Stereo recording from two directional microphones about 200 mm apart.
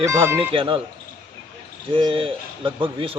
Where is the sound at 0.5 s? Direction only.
25° right (ahead or behind).